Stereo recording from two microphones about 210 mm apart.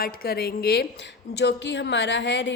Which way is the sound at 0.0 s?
45° left (ahead or behind).